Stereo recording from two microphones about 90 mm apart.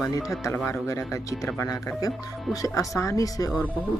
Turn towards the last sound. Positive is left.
turn(degrees=40)  # may be behind; listen again after turning